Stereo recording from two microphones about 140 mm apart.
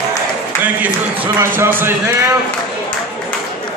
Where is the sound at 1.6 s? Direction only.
15° right (ahead or behind).